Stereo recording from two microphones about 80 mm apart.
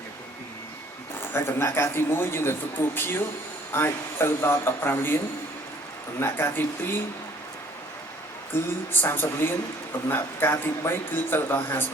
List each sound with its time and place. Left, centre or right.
1.2 s a man's voice: left
8.9 s speech: left